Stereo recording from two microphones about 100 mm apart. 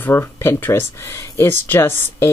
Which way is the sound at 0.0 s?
25° left (ahead or behind).